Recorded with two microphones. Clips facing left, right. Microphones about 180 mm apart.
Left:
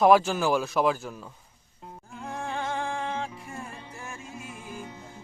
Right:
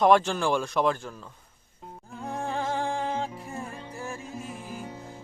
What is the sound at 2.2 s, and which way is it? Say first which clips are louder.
Music: right 2 dB; 35° right (ahead or behind).